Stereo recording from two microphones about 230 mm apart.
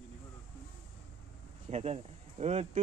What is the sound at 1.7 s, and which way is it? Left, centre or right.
Speech, right.